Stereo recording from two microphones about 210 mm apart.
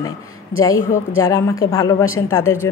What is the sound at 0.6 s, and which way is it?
Speech, 15° left (ahead or behind).